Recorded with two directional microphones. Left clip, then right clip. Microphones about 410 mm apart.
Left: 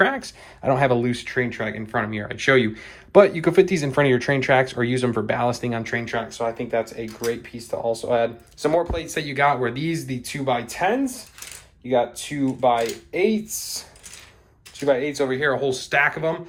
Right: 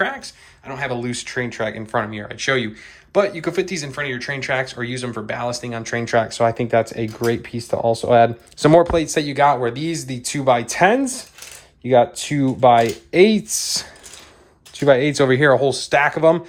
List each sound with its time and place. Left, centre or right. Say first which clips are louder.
0.0 s speech: left 2 dB; centre
14.8 s speech: right 6 dB; right